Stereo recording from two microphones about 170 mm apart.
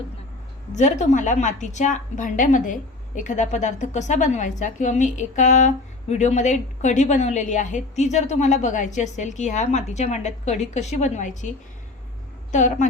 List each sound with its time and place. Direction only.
0.8 s a woman's voice: 45° left (ahead or behind)